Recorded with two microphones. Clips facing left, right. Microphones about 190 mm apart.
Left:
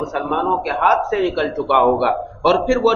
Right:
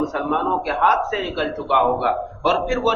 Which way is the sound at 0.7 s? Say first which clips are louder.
Left 3 dB; 65° left (ahead or behind).